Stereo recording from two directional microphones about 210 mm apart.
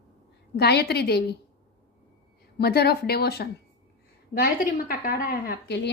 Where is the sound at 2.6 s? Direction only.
50° left (ahead or behind).